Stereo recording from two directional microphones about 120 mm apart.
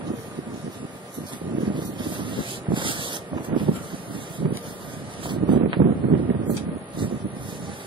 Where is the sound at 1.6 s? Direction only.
40° right (ahead or behind).